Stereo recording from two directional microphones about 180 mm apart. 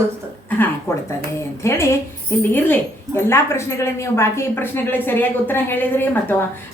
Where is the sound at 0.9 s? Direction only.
15° left (ahead or behind).